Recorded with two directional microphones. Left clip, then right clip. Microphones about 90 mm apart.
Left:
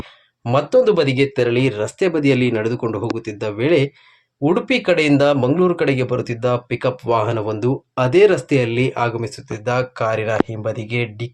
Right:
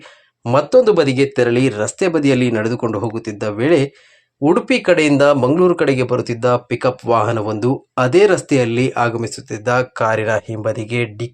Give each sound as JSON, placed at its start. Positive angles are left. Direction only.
{"t": 0.5, "sound": "speech", "side_deg": -30}